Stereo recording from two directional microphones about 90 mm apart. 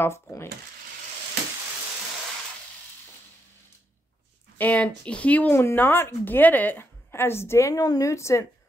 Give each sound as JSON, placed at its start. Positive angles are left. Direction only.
{"t": 4.6, "sound": "speech", "side_deg": 15}
{"t": 5.5, "sound": "speech", "side_deg": 25}